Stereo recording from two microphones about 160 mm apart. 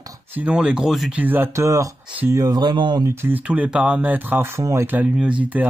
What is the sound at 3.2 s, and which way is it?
Speech, 10° right (ahead or behind).